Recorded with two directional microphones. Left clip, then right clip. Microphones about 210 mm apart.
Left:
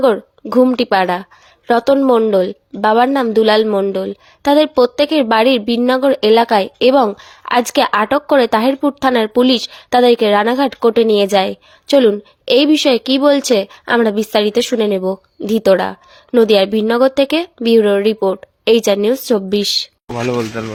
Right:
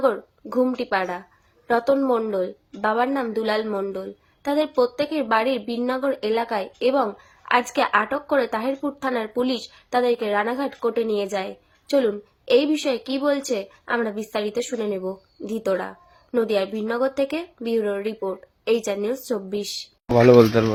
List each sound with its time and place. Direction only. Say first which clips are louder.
0.0 s a woman's voice: left 8 dB; 40° left (ahead or behind)
20.1 s speech: right 6 dB; 50° right (ahead or behind)